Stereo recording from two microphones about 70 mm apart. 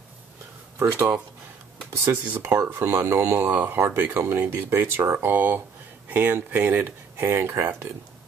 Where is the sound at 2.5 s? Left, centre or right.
Right.